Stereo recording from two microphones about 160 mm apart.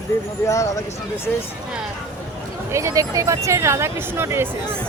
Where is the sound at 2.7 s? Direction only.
20° right (ahead or behind).